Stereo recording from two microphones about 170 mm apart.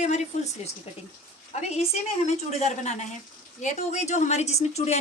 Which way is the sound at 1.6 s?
40° left (ahead or behind).